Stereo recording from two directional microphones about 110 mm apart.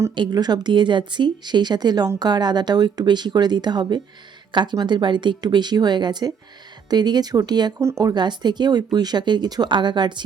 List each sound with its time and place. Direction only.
0.1 s speech: 40° right (ahead or behind)
7.8 s speech: 25° right (ahead or behind)
8.1 s speech: 40° right (ahead or behind)